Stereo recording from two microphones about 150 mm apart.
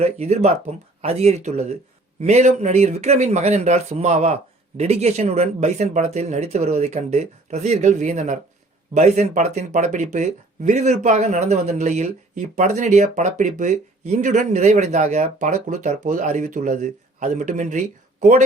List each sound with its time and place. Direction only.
0.0 s speech: 45° right (ahead or behind)